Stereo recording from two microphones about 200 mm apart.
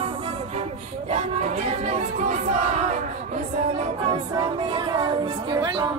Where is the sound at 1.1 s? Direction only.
35° right (ahead or behind).